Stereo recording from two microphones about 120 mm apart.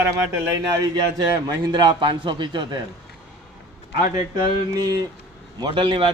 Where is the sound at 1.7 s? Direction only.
35° right (ahead or behind).